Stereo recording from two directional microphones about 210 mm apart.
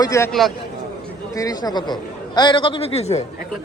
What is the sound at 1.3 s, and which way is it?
Speech, 15° left (ahead or behind).